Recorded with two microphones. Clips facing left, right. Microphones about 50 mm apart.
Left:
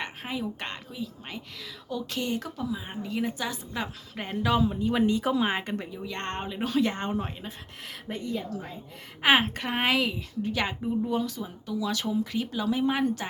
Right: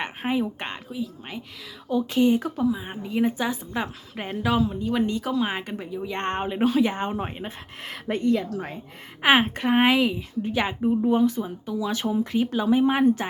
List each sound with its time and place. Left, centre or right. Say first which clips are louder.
0.0 s a woman's voice: right 7 dB; right
0.9 s speech: right 5 dB; centre
1.9 s a woman's voice: right 10 dB; right
4.1 s speech: right 1 dB; centre
5.5 s speech: even; centre
6.1 s a woman's voice: right 7 dB; right
6.7 s speech: right 3 dB; centre
7.3 s speech: right 5 dB; right
9.2 s a woman's voice: right 3 dB; centre; by 12.2 s right
12.2 s a woman's voice: right 6 dB; centre